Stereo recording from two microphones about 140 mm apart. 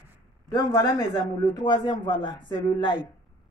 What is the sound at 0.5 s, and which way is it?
A man's voice, 25° left (ahead or behind).